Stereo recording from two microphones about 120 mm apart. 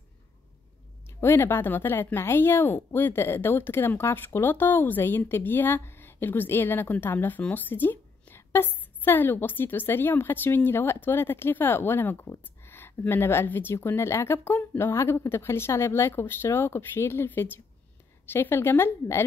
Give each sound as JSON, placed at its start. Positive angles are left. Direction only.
{"t": 1.2, "sound": "a woman's voice", "side_deg": 20}